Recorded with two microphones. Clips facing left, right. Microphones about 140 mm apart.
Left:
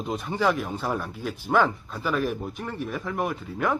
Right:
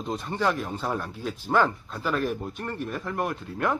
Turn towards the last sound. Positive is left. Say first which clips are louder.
# left 1 dB
turn(degrees=0)  # may be behind; listen again after turning